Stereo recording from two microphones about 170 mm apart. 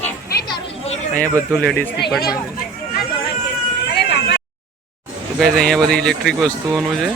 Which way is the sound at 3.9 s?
85° left.